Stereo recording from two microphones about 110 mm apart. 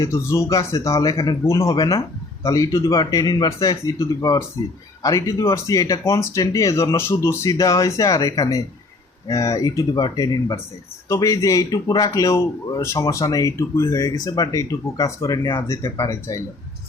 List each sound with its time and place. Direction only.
0.0 s a man's voice: 25° left (ahead or behind)